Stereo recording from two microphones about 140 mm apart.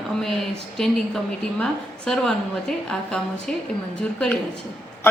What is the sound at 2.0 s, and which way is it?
A woman's voice, 5° left (ahead or behind).